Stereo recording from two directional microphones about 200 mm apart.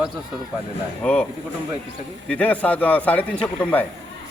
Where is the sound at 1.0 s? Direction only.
5° left (ahead or behind).